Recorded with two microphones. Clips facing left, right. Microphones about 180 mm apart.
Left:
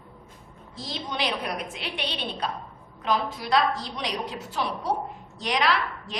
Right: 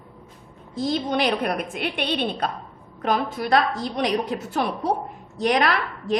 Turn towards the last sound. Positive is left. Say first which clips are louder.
# right 2 dB
turn(degrees=-50)  # may be behind; listen again after turning